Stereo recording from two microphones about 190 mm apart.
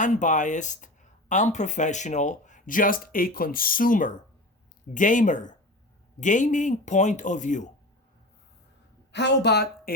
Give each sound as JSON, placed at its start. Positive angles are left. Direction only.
{"t": 0.0, "sound": "speech", "side_deg": 40}
{"t": 9.1, "sound": "a woman's voice", "side_deg": 65}